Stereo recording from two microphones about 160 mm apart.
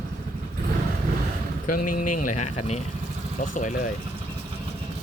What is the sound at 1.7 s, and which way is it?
Speech, 55° left (ahead or behind).